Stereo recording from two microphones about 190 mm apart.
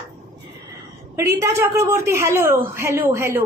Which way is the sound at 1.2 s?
15° right (ahead or behind).